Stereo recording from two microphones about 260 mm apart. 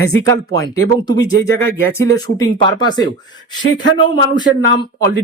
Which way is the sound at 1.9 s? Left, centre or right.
Centre.